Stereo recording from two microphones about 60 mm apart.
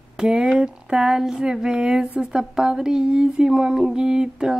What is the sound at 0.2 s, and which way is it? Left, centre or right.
Speech, centre.